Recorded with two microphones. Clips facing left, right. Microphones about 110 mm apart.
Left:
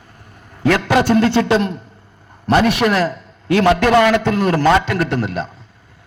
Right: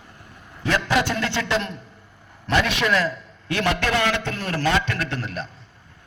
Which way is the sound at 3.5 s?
85° left.